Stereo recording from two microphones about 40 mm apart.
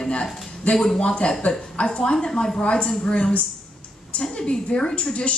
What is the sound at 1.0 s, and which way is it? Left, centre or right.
A woman's voice, left.